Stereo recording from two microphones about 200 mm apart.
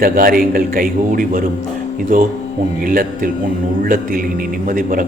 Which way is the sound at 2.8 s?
45° right (ahead or behind).